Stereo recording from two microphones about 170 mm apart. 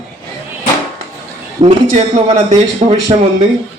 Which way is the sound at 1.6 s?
40° right (ahead or behind).